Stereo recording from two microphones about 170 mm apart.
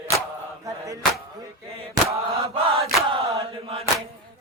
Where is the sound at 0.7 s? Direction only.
20° right (ahead or behind).